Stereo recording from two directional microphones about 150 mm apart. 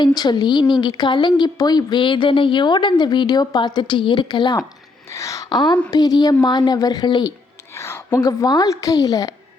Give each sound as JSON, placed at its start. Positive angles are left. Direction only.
{"t": 0.0, "sound": "a woman's voice", "side_deg": 30}
{"t": 5.0, "sound": "a woman's voice", "side_deg": 20}
{"t": 7.7, "sound": "a woman's voice", "side_deg": 15}